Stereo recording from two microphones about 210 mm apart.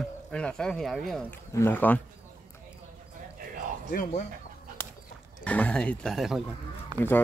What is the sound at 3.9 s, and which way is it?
Speech, 40° left (ahead or behind).